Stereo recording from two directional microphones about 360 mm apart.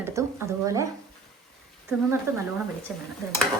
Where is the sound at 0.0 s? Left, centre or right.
Centre.